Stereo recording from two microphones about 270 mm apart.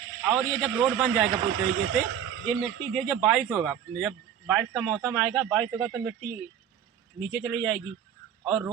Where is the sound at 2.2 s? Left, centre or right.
Right.